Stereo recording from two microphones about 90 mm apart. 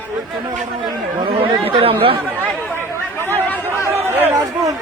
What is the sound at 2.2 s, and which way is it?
Chatter, 20° right (ahead or behind).